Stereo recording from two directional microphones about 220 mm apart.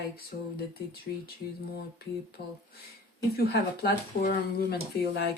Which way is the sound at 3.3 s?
45° left (ahead or behind).